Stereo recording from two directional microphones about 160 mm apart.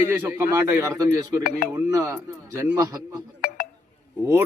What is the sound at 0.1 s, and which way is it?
A man's voice, 15° right (ahead or behind).